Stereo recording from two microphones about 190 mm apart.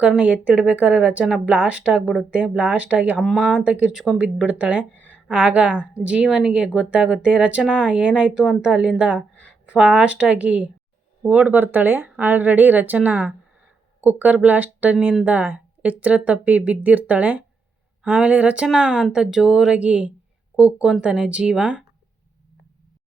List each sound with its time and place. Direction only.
0.0 s speech: 5° right (ahead or behind)